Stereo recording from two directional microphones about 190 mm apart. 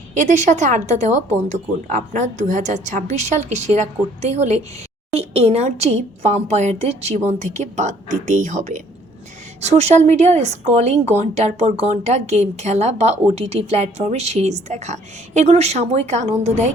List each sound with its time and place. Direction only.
0.1 s a woman's voice: 40° right (ahead or behind)